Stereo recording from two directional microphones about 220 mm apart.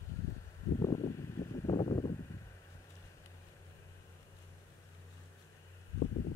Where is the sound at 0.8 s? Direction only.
15° left (ahead or behind).